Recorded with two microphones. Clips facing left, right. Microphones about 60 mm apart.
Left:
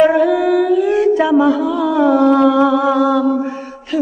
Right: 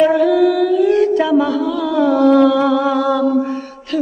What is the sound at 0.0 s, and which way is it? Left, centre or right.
Music, centre.